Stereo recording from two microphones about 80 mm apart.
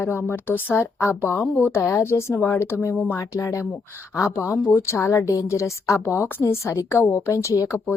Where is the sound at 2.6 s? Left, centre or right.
Left.